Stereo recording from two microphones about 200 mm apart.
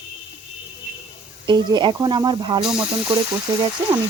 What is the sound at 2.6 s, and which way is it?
Speech, 5° right (ahead or behind).